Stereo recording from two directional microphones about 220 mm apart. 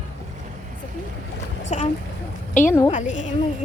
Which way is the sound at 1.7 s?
30° left (ahead or behind).